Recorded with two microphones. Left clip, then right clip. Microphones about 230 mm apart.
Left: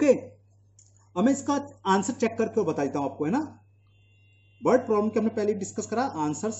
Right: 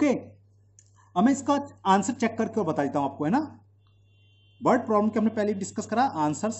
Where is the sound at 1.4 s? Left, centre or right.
Centre.